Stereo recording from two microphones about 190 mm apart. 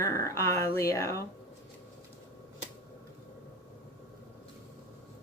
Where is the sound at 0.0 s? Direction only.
15° left (ahead or behind).